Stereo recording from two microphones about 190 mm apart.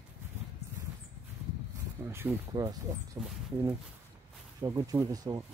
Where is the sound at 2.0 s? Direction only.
15° right (ahead or behind).